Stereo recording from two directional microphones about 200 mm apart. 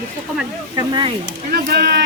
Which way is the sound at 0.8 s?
25° right (ahead or behind).